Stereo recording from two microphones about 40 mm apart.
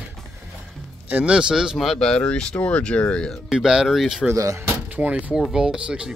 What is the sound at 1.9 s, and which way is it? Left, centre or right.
Speech, centre.